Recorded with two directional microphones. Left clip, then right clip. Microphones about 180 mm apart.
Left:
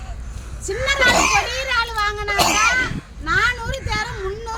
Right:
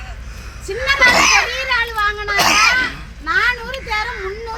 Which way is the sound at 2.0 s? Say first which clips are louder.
Right 3 dB; 40° left (ahead or behind).